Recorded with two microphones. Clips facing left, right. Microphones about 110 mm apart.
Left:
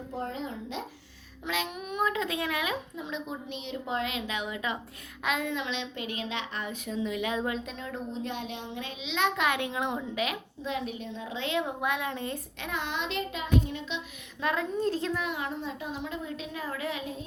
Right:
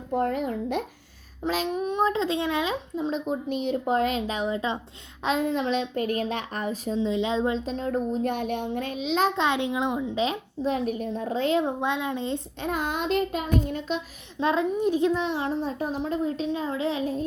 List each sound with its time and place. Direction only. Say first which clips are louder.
0.1 s speech: right 10 dB; 60° right (ahead or behind)
1.5 s a child's voice: right 7 dB; 35° right (ahead or behind); by 10.1 s 15° right (ahead or behind)
10.2 s a child's voice: right 6 dB; 30° right (ahead or behind)
11.8 s a child's voice: right 4 dB; 25° right (ahead or behind)
12.5 s child singing: right 5 dB; 40° right (ahead or behind)
14.3 s a child's voice: right 6 dB; 25° right (ahead or behind)